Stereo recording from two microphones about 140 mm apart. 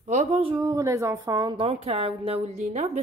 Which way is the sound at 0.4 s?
35° right (ahead or behind).